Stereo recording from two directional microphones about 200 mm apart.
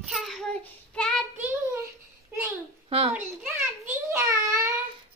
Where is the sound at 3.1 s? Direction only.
10° right (ahead or behind).